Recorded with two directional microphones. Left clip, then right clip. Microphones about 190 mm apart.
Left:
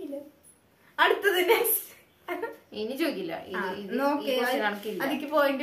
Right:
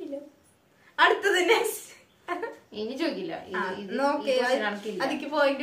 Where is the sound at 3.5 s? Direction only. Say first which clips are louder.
Right 2 dB; 10° right (ahead or behind).